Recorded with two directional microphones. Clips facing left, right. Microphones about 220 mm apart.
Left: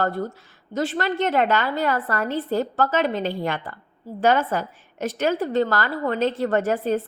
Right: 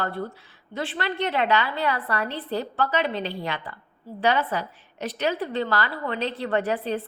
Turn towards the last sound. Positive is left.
turn(degrees=45)  # may be behind; listen again after turning